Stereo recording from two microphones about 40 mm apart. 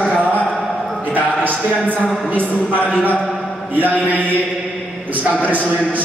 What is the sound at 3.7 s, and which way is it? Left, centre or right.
A woman's voice, right.